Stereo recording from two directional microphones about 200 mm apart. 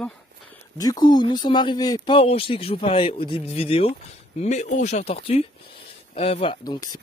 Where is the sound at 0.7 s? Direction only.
20° left (ahead or behind).